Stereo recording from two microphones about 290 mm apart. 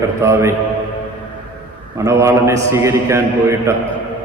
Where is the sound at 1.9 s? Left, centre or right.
Centre.